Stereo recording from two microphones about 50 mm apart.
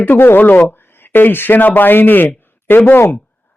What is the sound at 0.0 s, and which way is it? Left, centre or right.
Speech, left.